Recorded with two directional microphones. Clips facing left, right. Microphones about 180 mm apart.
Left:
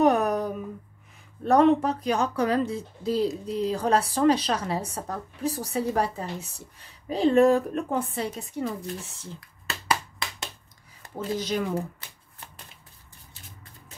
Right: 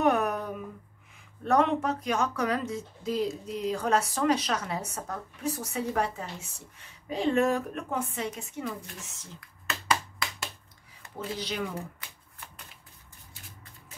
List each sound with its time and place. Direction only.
0.0 s a sound: 35° left (ahead or behind)
1.4 s speech: 35° left (ahead or behind)
11.0 s speech: 40° left (ahead or behind)